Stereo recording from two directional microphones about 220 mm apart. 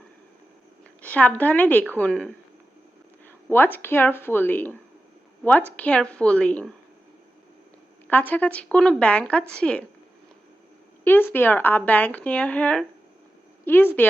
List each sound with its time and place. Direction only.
1.0 s a woman's voice: 5° left (ahead or behind)
8.0 s a woman's voice: 10° left (ahead or behind)
11.0 s speech: 10° left (ahead or behind)